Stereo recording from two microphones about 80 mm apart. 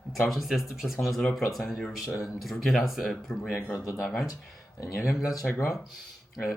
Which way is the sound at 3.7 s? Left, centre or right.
Left.